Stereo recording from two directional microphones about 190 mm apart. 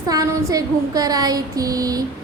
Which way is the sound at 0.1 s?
20° right (ahead or behind).